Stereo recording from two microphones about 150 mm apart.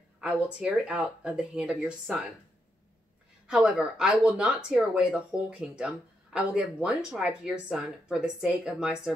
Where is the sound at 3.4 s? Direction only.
5° right (ahead or behind).